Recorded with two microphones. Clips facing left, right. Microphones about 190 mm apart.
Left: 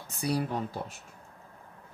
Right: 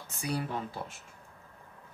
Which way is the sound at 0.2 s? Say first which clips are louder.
Left 4 dB; 35° left (ahead or behind).